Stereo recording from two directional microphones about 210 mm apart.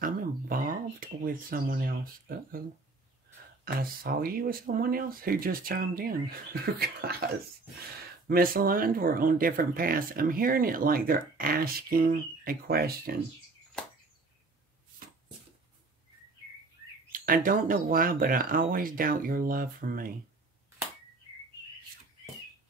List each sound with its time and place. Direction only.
0.0 s speech: 40° right (ahead or behind)
3.6 s speech: 45° right (ahead or behind)
8.3 s speech: 45° right (ahead or behind)
17.1 s speech: 40° right (ahead or behind)